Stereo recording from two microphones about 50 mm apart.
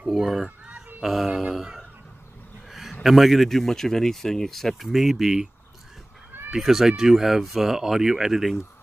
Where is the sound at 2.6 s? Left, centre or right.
Centre.